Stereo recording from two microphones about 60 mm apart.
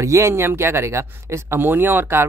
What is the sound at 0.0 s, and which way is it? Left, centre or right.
Speech, right.